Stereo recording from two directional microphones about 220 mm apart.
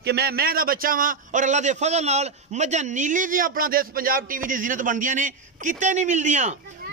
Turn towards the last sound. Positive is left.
turn(degrees=-35)  # may be behind; listen again after turning